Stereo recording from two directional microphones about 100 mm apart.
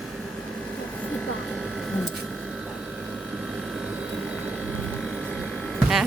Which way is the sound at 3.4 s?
5° right (ahead or behind).